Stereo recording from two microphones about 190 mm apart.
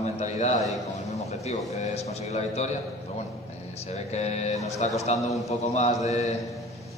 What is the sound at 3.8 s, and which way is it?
A man's voice, 35° left (ahead or behind).